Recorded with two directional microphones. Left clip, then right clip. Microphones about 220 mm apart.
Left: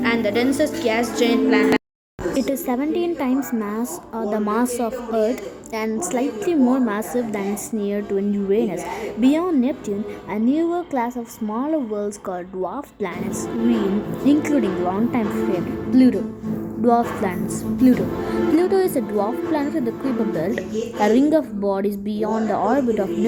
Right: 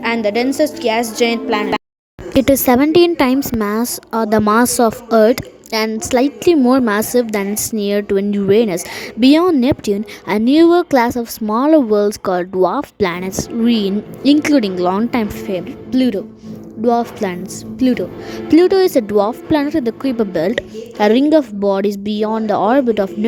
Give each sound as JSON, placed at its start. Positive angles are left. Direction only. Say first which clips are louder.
{"t": 0.0, "sound": "a woman's voice", "louder": "right 4 dB", "side_deg": -35}
{"t": 2.3, "sound": "a woman's voice", "louder": "right 12 dB", "side_deg": -55}